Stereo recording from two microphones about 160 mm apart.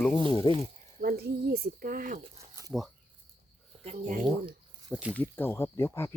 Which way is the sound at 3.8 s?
45° right (ahead or behind).